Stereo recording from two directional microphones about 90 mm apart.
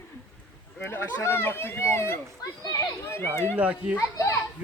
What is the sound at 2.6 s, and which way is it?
Speech, 40° left (ahead or behind).